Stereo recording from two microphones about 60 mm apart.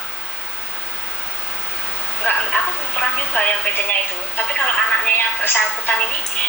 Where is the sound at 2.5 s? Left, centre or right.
Centre.